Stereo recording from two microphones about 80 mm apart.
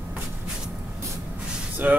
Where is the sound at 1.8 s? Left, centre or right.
Centre.